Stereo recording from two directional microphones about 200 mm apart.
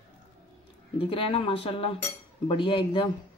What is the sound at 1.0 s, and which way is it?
A woman's voice, 25° left (ahead or behind).